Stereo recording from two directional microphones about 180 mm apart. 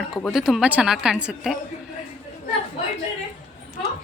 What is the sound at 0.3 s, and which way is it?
A woman's voice, centre (ahead or behind).